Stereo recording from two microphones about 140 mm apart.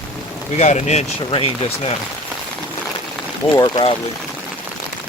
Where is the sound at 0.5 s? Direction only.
55° left (ahead or behind).